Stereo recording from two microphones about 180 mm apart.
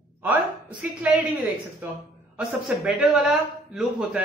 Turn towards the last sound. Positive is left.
turn(degrees=0)  # may be behind; listen again after turning